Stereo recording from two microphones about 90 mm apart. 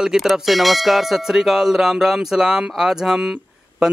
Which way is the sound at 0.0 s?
5° right (ahead or behind).